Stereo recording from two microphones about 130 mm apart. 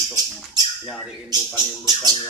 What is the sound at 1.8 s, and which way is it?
Speech, 30° right (ahead or behind).